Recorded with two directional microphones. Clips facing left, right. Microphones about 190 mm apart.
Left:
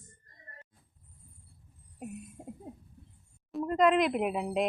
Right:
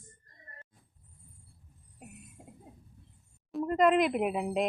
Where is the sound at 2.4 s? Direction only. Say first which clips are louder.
Left 7 dB; 35° left (ahead or behind).